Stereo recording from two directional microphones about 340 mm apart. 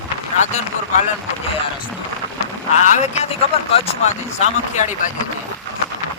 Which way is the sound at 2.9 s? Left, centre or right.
Centre.